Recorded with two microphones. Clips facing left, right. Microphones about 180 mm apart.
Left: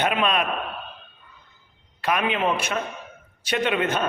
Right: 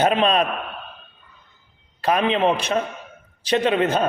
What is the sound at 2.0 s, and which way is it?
A man's voice, 30° right (ahead or behind).